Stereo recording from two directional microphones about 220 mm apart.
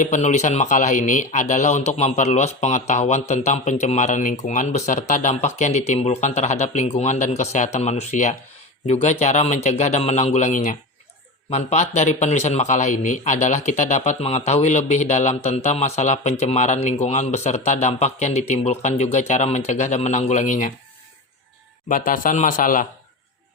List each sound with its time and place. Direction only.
0.0 s speech: 35° left (ahead or behind)
21.8 s speech: 40° left (ahead or behind)